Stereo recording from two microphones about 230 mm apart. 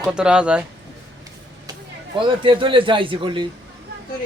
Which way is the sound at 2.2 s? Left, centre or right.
Right.